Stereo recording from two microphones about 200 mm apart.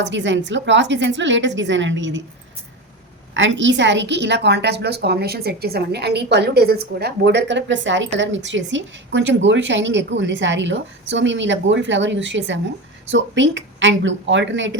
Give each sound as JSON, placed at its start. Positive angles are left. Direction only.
{"t": 0.0, "sound": "a woman's voice", "side_deg": -65}
{"t": 3.3, "sound": "a woman's voice", "side_deg": -70}